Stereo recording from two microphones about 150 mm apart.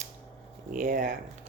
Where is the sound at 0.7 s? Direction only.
60° right (ahead or behind).